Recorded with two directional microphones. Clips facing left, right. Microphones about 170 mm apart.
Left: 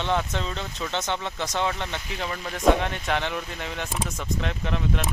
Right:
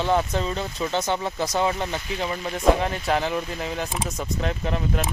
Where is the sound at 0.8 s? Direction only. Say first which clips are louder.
Right 4 dB; 35° right (ahead or behind).